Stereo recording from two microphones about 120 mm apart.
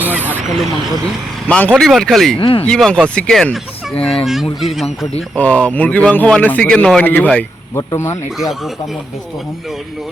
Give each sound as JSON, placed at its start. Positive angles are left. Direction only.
{"t": 0.0, "sound": "a sound", "side_deg": -15}
{"t": 0.4, "sound": "speech", "side_deg": -5}
{"t": 1.5, "sound": "speech", "side_deg": 10}
{"t": 2.4, "sound": "speech", "side_deg": 50}
{"t": 2.6, "sound": "speech", "side_deg": 5}
{"t": 5.4, "sound": "speech", "side_deg": 10}
{"t": 7.8, "sound": "speech", "side_deg": 25}